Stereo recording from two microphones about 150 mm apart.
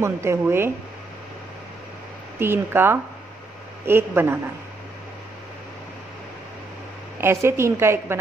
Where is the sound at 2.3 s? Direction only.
15° right (ahead or behind).